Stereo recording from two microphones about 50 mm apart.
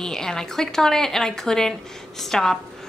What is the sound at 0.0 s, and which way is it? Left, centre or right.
Speech, centre.